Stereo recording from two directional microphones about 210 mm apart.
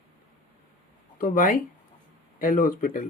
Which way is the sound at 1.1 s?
40° left (ahead or behind).